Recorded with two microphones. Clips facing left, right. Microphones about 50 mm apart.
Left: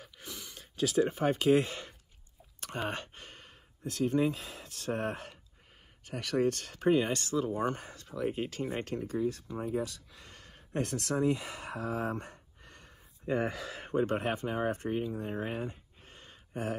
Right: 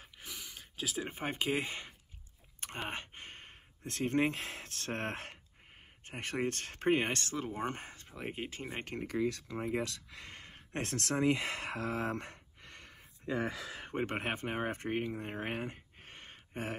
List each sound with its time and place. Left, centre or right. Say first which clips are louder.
0.2 s a sound: left 1 dB; centre
1.0 s speech: left 7 dB; right
2.9 s speech: left 3 dB; centre
3.3 s speech: right 1 dB; right
6.0 s speech: left 6 dB; right
8.9 s speech: left 3 dB; right
9.2 s speech: left 1 dB; right
10.2 s a sound: right 3 dB; right
10.7 s speech: left 3 dB; right
11.2 s speech: even; right
13.9 s speech: left 5 dB; right